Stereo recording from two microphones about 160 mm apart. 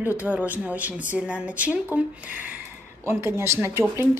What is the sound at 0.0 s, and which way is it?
Speech, 10° right (ahead or behind).